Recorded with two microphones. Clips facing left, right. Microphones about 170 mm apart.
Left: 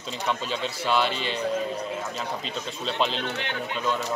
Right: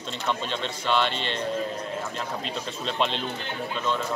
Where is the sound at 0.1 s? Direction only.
5° left (ahead or behind).